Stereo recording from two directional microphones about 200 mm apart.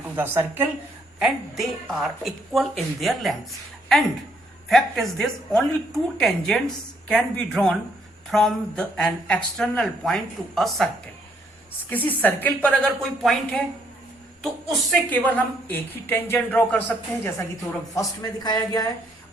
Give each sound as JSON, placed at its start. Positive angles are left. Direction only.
{"t": 0.2, "sound": "a woman's voice", "side_deg": -10}
{"t": 12.0, "sound": "a woman's voice", "side_deg": 10}
{"t": 17.9, "sound": "speech", "side_deg": 20}